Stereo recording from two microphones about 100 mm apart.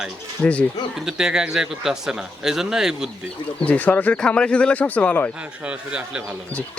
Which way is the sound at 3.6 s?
15° left (ahead or behind).